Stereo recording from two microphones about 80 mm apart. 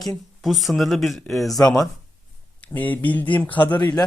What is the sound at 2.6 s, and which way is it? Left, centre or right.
Speech, centre.